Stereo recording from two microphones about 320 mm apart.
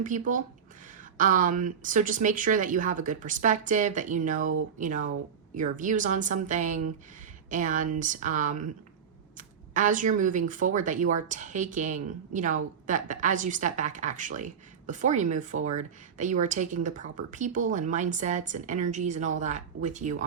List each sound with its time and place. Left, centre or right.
0.0 s speech: right